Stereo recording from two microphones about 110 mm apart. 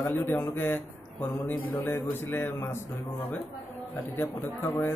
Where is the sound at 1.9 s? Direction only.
20° left (ahead or behind).